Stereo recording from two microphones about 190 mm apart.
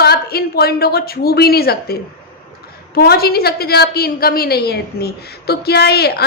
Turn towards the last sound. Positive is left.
turn(degrees=60)  # may be behind; listen again after turning